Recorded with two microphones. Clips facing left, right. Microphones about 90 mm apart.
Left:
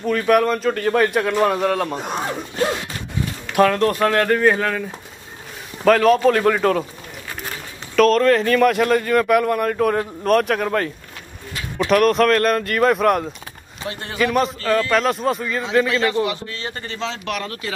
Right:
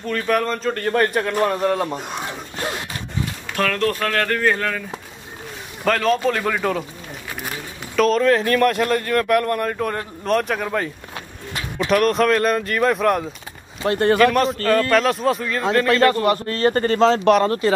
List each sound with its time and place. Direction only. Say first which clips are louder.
0.0 s a man's voice: left 4 dB; 5° left (ahead or behind)
3.5 s speech: left 5 dB; 15° left (ahead or behind)
5.9 s a man's voice: left 5 dB; 5° left (ahead or behind)
7.9 s a man's voice: left 2 dB; centre (ahead or behind)
13.8 s speech: right 11 dB; 55° right (ahead or behind)
14.2 s a man's voice: right 3 dB; centre (ahead or behind)
15.9 s speech: right 4 dB; 50° right (ahead or behind)